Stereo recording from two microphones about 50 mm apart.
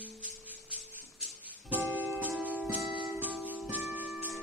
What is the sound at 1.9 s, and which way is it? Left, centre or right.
Music, right.